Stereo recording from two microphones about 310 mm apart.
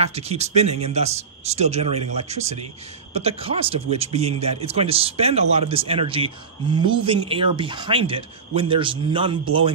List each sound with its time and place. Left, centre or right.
0.0 s a man's voice: centre